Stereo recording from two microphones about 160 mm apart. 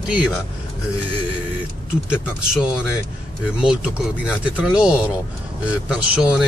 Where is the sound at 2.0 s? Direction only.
5° right (ahead or behind).